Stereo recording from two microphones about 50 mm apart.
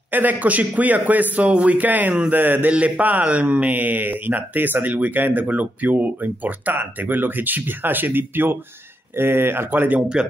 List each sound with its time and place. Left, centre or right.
0.1 s speech: right
2.3 s speech: right
2.7 s speech: right